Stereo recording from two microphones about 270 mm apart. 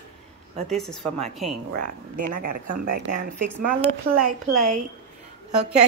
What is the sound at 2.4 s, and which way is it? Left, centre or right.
Speech, right.